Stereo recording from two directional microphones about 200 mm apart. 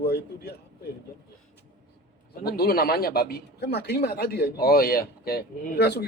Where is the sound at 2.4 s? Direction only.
50° left (ahead or behind).